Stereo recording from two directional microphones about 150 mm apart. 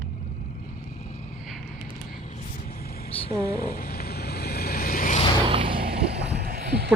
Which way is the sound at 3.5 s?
90° left.